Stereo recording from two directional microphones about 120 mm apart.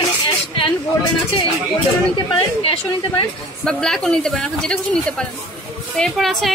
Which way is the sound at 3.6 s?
5° left (ahead or behind).